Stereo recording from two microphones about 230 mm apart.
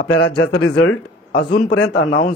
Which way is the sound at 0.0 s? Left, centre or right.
Left.